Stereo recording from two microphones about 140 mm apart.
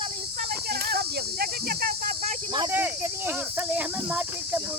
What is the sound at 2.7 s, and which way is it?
Cricket, 15° right (ahead or behind).